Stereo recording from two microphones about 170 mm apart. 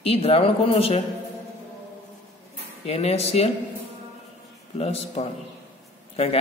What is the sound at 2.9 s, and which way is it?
Speech, 35° left (ahead or behind).